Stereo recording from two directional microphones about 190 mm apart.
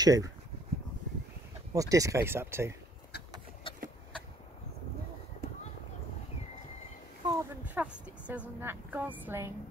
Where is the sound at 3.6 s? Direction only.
25° left (ahead or behind).